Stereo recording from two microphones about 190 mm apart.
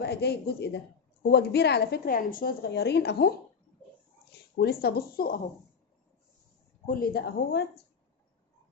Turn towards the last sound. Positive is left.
turn(degrees=60)  # may be behind; listen again after turning